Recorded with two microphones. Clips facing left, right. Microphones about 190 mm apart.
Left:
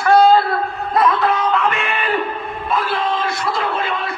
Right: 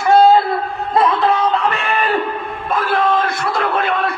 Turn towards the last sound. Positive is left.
turn(degrees=-55)  # may be behind; listen again after turning